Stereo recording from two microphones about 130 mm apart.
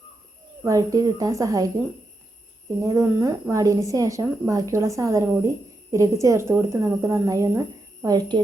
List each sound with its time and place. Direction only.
0.6 s a woman's voice: 25° right (ahead or behind)
2.8 s a woman's voice: 25° right (ahead or behind)